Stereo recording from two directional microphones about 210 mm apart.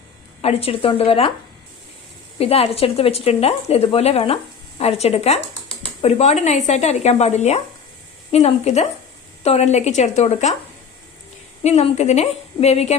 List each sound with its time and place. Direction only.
0.4 s speech: 25° left (ahead or behind)
2.4 s speech: 30° left (ahead or behind)
11.6 s speech: 30° left (ahead or behind)